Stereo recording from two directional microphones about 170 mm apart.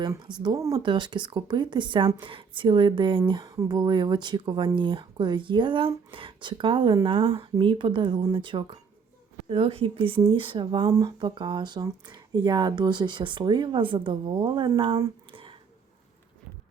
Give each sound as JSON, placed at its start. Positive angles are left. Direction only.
{"t": 0.0, "sound": "speech", "side_deg": -25}